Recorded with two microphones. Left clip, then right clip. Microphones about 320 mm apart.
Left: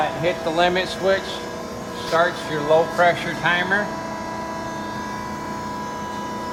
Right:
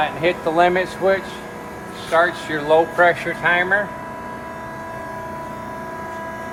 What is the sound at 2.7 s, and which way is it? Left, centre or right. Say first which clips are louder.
Speech: right 2 dB; right.